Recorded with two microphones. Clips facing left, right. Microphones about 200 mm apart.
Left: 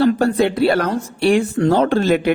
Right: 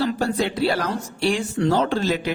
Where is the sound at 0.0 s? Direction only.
55° left (ahead or behind).